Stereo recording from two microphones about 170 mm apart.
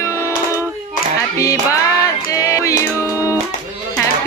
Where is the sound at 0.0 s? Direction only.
15° left (ahead or behind).